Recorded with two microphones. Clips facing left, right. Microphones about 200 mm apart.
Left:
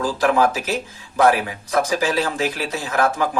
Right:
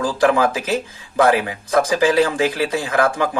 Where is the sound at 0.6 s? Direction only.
50° right (ahead or behind).